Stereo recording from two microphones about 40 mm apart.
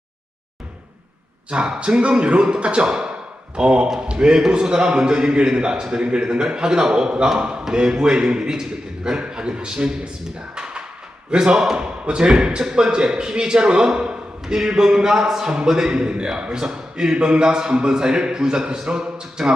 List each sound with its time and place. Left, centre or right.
1.5 s a man's voice: right
10.5 s a sound: centre
11.3 s a man's voice: right